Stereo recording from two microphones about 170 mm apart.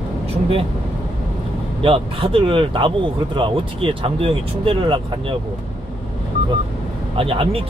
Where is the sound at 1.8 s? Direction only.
35° right (ahead or behind).